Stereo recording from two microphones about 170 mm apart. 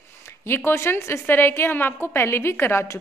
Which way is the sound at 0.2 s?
15° left (ahead or behind).